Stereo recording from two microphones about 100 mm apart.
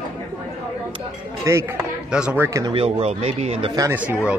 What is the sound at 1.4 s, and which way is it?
A man's voice, 30° right (ahead or behind).